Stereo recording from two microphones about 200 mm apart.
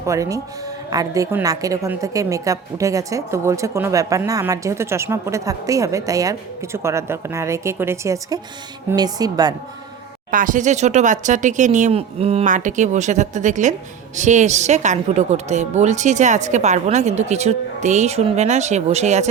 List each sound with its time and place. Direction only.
0.0 s a woman's voice: 15° right (ahead or behind)
10.3 s a woman's voice: 40° right (ahead or behind)